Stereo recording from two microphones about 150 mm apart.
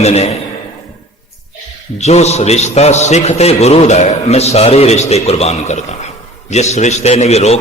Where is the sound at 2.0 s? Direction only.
45° left (ahead or behind).